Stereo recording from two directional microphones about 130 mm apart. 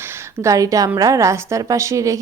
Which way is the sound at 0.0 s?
25° right (ahead or behind).